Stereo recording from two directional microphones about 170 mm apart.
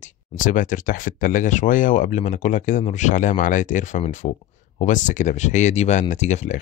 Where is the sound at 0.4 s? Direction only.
50° left (ahead or behind).